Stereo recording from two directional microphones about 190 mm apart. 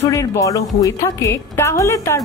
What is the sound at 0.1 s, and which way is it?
A woman's voice, 15° left (ahead or behind).